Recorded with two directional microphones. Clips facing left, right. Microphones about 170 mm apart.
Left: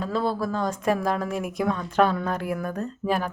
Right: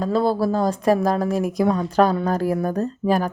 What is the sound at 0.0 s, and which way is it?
Speech, 35° right (ahead or behind).